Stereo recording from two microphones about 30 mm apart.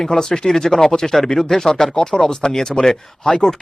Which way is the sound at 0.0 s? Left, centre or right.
Centre.